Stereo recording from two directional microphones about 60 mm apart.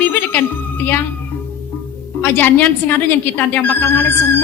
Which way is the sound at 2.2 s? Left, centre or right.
Left.